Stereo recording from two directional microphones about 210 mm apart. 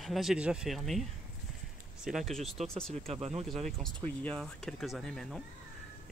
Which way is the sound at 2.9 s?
30° right (ahead or behind).